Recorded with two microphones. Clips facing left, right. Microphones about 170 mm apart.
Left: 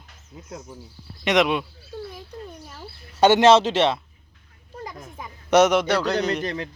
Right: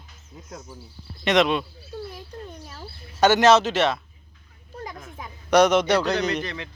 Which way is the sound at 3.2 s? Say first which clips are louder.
Left 2 dB; 30° left (ahead or behind).